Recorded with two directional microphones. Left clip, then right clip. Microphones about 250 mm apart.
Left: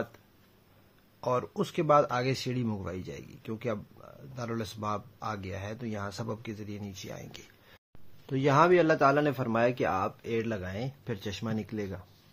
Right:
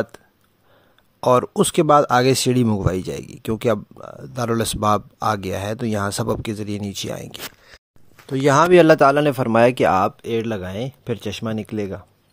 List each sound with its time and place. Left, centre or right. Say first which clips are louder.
1.2 s speech: right 14 dB; right